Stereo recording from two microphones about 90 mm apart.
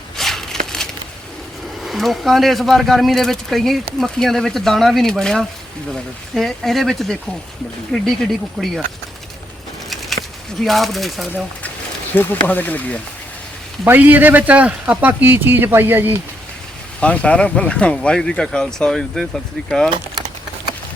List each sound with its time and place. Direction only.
0.2 s a sound: 5° left (ahead or behind)
1.8 s speech: centre (ahead or behind)
10.6 s speech: centre (ahead or behind)
12.1 s speech: 20° left (ahead or behind)
13.8 s a man's voice: 20° right (ahead or behind)
17.0 s speech: 15° left (ahead or behind)